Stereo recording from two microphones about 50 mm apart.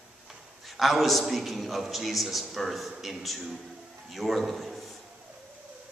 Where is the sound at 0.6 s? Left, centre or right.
Centre.